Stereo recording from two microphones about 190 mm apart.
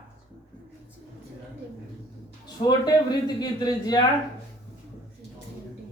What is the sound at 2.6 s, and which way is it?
A man's voice, 20° left (ahead or behind).